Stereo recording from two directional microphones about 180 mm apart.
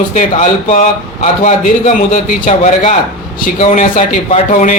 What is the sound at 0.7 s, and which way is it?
Speech, 45° left (ahead or behind).